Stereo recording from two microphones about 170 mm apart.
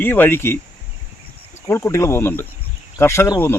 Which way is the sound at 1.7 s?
15° left (ahead or behind).